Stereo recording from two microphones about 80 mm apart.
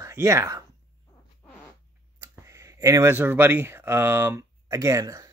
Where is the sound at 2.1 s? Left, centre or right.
Right.